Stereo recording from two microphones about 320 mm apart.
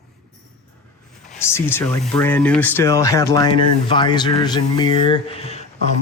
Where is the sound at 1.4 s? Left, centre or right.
Centre.